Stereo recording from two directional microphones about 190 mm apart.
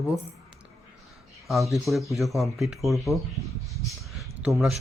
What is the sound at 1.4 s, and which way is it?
A man's voice, centre (ahead or behind).